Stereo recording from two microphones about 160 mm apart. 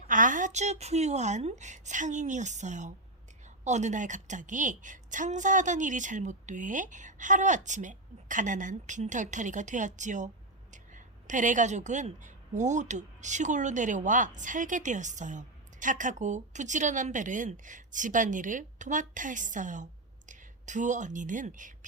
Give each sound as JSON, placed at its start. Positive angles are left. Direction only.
{"t": 0.1, "sound": "a woman's voice", "side_deg": -55}